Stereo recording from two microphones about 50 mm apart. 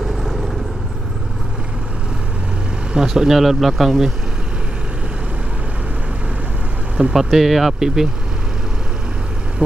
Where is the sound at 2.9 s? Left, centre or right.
Centre.